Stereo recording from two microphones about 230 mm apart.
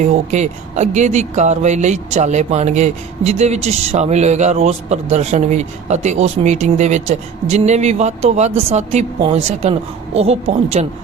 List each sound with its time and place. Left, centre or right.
0.0 s speech: right